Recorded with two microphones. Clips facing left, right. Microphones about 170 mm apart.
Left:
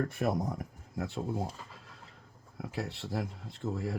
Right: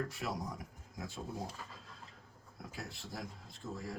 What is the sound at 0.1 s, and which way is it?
Speech, 55° left (ahead or behind).